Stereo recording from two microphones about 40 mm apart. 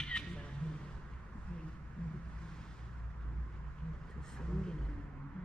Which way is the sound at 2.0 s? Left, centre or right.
Left.